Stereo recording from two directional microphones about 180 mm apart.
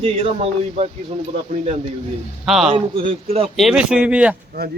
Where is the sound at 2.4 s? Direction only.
Centre (ahead or behind).